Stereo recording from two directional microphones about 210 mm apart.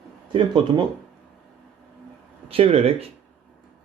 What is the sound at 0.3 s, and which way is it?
Speech, 25° right (ahead or behind).